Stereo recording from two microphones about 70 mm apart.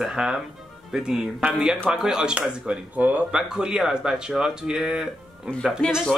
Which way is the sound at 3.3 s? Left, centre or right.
Centre.